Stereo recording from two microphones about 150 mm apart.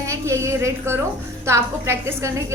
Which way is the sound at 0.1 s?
20° right (ahead or behind).